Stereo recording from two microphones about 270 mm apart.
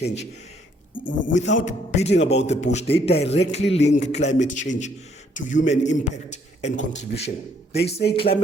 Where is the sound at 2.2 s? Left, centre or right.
Left.